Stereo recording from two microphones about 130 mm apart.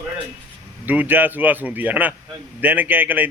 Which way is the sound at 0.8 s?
15° right (ahead or behind).